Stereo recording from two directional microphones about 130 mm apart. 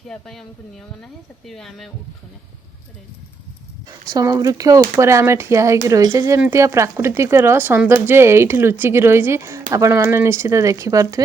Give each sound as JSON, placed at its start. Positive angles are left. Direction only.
{"t": 0.1, "sound": "speech", "side_deg": 5}
{"t": 4.1, "sound": "speech", "side_deg": -25}